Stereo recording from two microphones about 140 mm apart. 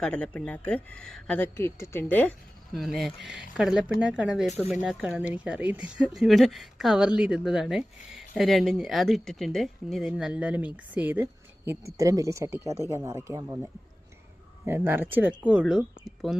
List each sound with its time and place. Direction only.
0.0 s speech: 10° left (ahead or behind)
2.7 s speech: centre (ahead or behind)